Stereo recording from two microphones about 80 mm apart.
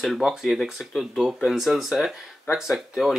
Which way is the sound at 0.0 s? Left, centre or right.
Centre.